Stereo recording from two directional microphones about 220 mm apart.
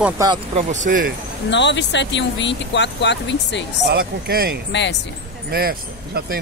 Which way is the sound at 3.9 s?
45° right (ahead or behind).